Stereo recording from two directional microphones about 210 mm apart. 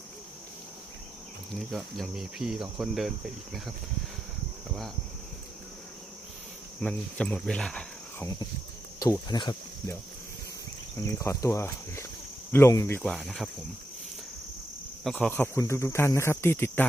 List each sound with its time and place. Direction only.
1.5 s speech: centre (ahead or behind)
6.8 s speech: 5° left (ahead or behind)
9.0 s speech: 20° left (ahead or behind)
10.9 s speech: 15° left (ahead or behind)
13.0 s speech: centre (ahead or behind)
15.0 s speech: 5° left (ahead or behind)